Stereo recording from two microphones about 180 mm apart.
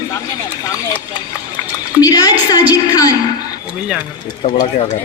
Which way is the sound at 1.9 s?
20° left (ahead or behind).